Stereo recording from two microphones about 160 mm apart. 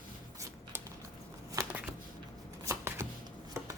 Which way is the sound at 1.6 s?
20° right (ahead or behind).